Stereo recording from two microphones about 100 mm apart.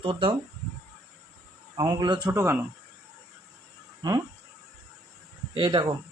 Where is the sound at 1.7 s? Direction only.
40° right (ahead or behind).